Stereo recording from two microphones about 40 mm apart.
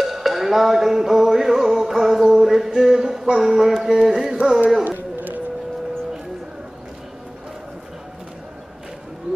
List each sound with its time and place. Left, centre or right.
0.0 s music: centre
3.3 s mantra: centre
4.8 s music: right